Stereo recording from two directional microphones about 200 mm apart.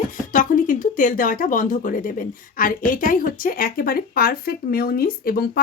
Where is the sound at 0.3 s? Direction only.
40° left (ahead or behind).